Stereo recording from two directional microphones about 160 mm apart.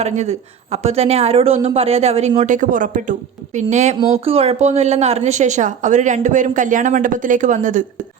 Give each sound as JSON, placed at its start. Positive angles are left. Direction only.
{"t": 0.0, "sound": "a woman's voice", "side_deg": -45}
{"t": 3.9, "sound": "a woman's voice", "side_deg": -35}